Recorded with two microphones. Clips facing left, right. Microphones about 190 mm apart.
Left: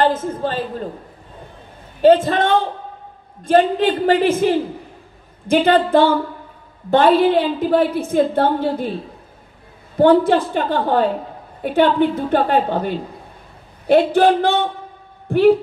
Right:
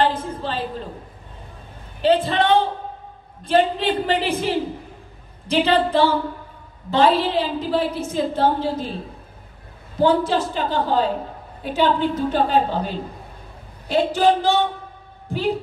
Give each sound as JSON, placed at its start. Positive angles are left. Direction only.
{"t": 0.0, "sound": "speech", "side_deg": 50}
{"t": 2.0, "sound": "a woman's voice", "side_deg": 45}
{"t": 9.9, "sound": "a woman's voice", "side_deg": 60}